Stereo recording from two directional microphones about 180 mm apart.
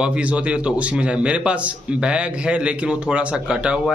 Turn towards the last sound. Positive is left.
turn(degrees=-5)  # may be behind; listen again after turning